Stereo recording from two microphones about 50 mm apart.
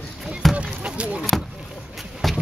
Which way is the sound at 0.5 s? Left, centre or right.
Right.